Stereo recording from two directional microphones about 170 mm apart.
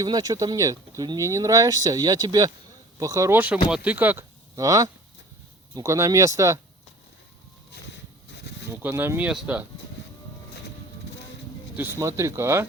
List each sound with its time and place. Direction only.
0.0 s speech: 25° right (ahead or behind)
8.3 s insect: 90° left
8.7 s speech: 15° right (ahead or behind)
11.8 s speech: 15° right (ahead or behind)